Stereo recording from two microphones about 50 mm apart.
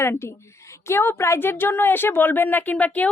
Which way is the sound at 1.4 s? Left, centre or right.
Left.